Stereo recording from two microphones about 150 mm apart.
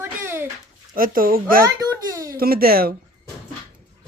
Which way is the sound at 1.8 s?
25° right (ahead or behind).